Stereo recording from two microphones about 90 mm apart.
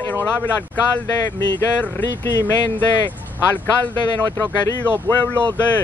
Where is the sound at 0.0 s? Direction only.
20° left (ahead or behind).